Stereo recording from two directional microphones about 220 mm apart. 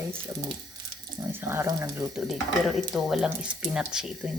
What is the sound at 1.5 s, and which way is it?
Speech, 10° right (ahead or behind).